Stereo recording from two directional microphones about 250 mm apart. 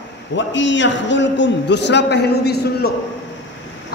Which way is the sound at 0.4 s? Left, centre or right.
Left.